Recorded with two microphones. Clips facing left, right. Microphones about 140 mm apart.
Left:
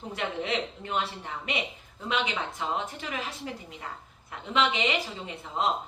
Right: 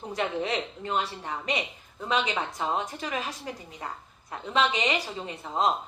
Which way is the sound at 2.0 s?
40° right (ahead or behind).